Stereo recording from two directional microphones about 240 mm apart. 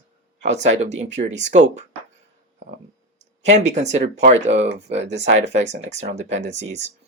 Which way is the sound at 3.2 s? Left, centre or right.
Right.